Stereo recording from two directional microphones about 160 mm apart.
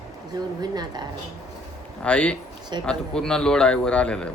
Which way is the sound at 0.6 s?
25° right (ahead or behind).